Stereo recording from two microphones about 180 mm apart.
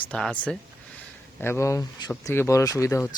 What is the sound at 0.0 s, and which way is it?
Speech, 5° left (ahead or behind).